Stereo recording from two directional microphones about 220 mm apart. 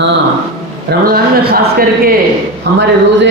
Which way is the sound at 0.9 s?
45° right (ahead or behind).